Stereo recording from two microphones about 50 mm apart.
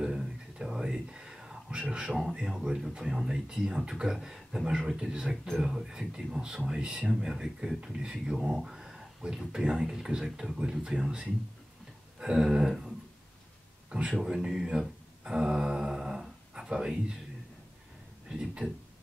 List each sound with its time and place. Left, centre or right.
0.0 s whispering: centre
2.3 s speech: centre
13.8 s a man's voice: centre
14.2 s speech: centre
18.3 s speech: centre